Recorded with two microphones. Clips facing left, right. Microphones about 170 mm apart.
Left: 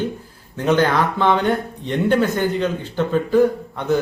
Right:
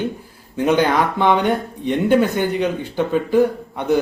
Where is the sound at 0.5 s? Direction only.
15° right (ahead or behind).